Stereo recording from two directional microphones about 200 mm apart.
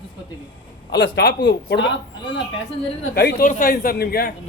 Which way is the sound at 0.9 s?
60° left (ahead or behind).